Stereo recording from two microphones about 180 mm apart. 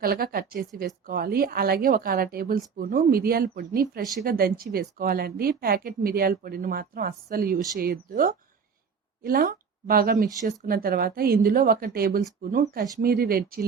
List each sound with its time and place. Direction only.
0.0 s speech: 55° right (ahead or behind)